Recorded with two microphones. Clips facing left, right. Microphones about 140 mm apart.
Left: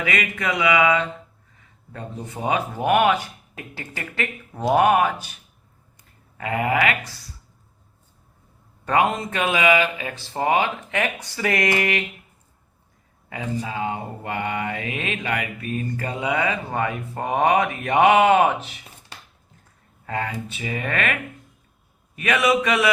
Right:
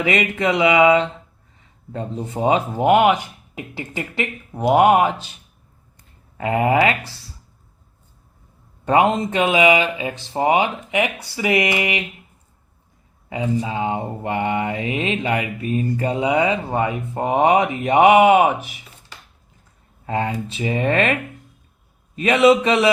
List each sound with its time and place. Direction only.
0.0 s mantra: 25° right (ahead or behind)
8.8 s mantra: 20° right (ahead or behind)
13.3 s mantra: 20° right (ahead or behind)
20.1 s mantra: 25° right (ahead or behind)